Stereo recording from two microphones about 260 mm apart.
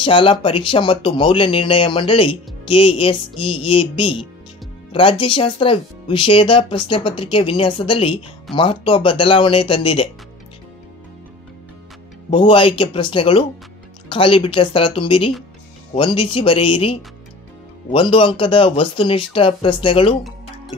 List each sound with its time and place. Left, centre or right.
0.0 s speech: centre
12.3 s speech: centre